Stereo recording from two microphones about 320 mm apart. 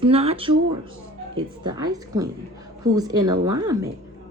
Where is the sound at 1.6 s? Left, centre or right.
Centre.